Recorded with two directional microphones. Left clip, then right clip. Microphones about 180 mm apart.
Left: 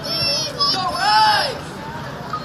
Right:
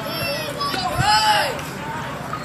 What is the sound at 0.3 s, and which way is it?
Children playing, 20° right (ahead or behind).